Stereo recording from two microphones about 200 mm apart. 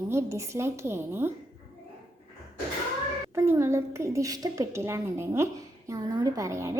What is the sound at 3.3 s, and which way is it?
A woman's voice, 15° right (ahead or behind).